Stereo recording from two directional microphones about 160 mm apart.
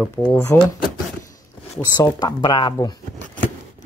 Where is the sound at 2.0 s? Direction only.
25° left (ahead or behind).